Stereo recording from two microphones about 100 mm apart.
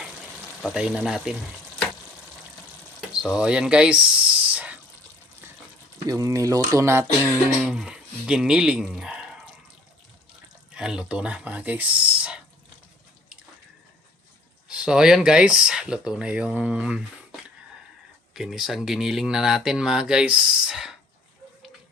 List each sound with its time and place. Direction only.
0.7 s speech: 10° right (ahead or behind)
3.1 s speech: 10° right (ahead or behind)
6.1 s speech: 35° right (ahead or behind)
7.6 s speech: 5° right (ahead or behind)
10.8 s speech: 10° right (ahead or behind)
14.7 s speech: 5° right (ahead or behind)
18.3 s speech: 5° right (ahead or behind)